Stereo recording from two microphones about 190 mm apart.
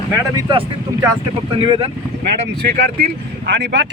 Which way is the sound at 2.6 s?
50° right (ahead or behind).